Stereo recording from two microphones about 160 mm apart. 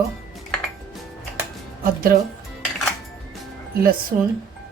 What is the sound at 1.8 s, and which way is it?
Speech, 65° right (ahead or behind).